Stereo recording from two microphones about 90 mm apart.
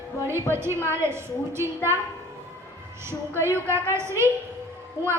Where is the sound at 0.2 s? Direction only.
30° right (ahead or behind).